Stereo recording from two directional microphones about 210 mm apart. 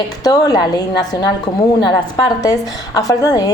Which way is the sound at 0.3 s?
15° left (ahead or behind).